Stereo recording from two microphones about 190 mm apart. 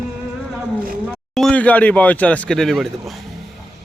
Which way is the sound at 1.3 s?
5° left (ahead or behind).